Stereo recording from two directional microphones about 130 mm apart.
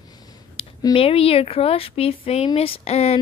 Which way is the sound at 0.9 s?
50° left (ahead or behind).